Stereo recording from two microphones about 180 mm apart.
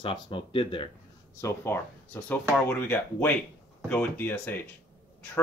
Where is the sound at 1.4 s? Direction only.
15° left (ahead or behind).